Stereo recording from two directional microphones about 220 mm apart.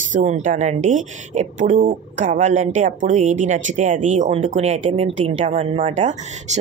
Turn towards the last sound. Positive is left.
turn(degrees=-30)  # may be behind; listen again after turning